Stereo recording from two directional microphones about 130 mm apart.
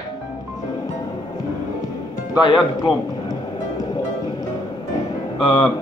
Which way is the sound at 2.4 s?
40° left (ahead or behind).